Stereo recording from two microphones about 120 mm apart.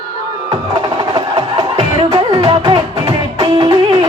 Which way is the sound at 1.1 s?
50° right (ahead or behind).